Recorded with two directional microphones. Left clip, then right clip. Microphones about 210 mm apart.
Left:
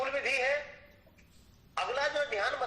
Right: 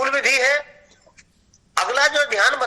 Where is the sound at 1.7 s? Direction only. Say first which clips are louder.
Right 14 dB; 55° right (ahead or behind).